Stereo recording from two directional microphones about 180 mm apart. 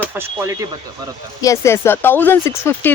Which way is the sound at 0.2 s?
15° right (ahead or behind).